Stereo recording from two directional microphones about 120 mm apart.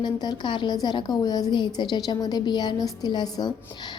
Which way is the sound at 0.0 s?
35° left (ahead or behind).